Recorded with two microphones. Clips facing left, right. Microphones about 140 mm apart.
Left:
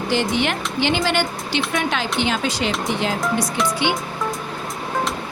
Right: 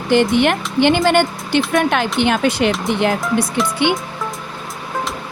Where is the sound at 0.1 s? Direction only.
55° right (ahead or behind).